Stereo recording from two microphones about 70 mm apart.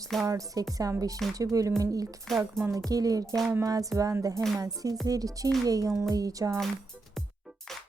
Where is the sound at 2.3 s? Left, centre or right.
Centre.